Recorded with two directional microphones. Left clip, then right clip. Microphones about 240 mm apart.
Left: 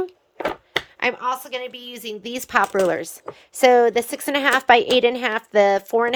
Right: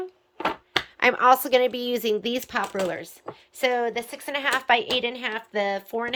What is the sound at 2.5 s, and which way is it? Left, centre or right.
Speech, centre.